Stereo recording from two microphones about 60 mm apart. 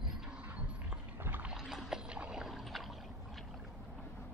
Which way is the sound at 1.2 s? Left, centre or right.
Right.